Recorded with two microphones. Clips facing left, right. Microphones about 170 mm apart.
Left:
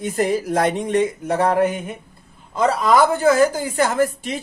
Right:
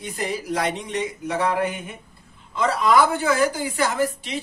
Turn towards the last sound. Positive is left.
turn(degrees=50)  # may be behind; listen again after turning